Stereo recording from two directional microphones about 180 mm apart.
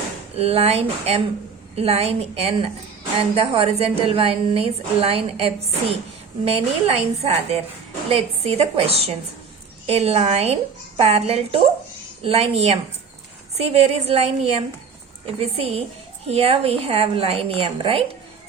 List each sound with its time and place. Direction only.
0.3 s a woman's voice: 35° right (ahead or behind)